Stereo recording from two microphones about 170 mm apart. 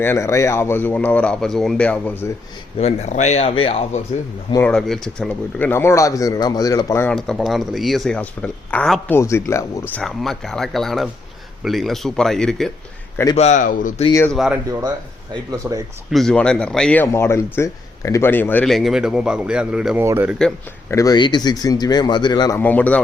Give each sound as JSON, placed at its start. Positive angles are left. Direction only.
{"t": 0.0, "sound": "speech", "side_deg": 15}
{"t": 2.7, "sound": "speech", "side_deg": 40}
{"t": 4.6, "sound": "speech", "side_deg": 5}
{"t": 7.3, "sound": "speech", "side_deg": 0}
{"t": 9.9, "sound": "speech", "side_deg": 0}
{"t": 13.3, "sound": "speech", "side_deg": 40}
{"t": 14.3, "sound": "speech", "side_deg": -5}
{"t": 15.6, "sound": "speech", "side_deg": -10}
{"t": 16.1, "sound": "speech", "side_deg": 5}
{"t": 20.9, "sound": "speech", "side_deg": 20}
{"t": 22.5, "sound": "speech", "side_deg": 10}